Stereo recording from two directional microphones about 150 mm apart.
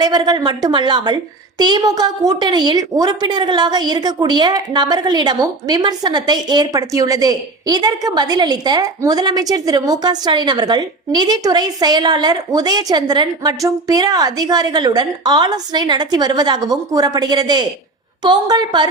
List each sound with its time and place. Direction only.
0.0 s a woman's voice: 30° right (ahead or behind)